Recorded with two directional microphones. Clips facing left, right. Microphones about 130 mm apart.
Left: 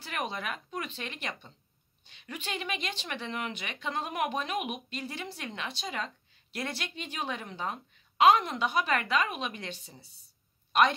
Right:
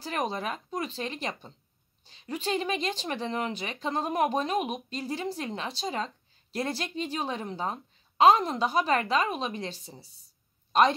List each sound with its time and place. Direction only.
0.0 s a woman's voice: 35° right (ahead or behind)